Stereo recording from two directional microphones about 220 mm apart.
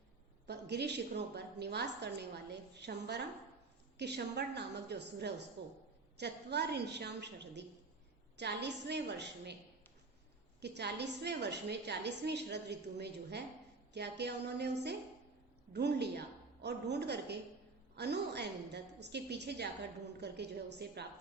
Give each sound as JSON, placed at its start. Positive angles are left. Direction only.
{"t": 0.4, "sound": "a woman's voice", "side_deg": -50}
{"t": 10.6, "sound": "a woman's voice", "side_deg": -50}